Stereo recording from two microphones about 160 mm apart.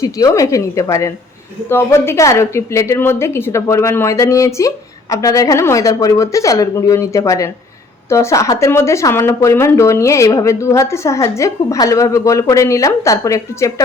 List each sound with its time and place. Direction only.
0.0 s a woman's voice: 20° left (ahead or behind)